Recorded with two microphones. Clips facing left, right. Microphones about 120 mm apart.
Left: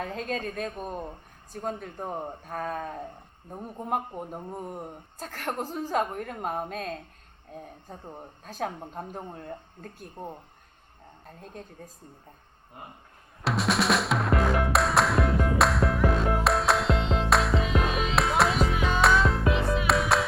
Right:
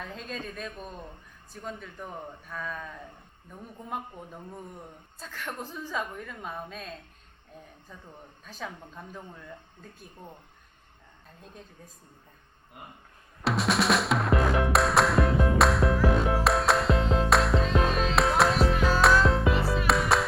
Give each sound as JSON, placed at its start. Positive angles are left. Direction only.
{"t": 0.0, "sound": "a woman's voice", "side_deg": 50}
{"t": 11.3, "sound": "a woman's voice", "side_deg": 50}
{"t": 13.4, "sound": "music", "side_deg": 0}